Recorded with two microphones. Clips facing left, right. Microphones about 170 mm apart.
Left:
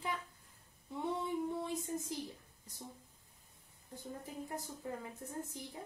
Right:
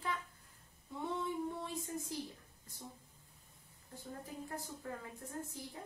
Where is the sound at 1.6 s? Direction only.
20° left (ahead or behind).